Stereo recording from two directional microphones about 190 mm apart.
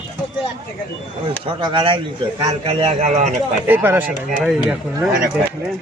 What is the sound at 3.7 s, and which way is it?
Speech, 10° right (ahead or behind).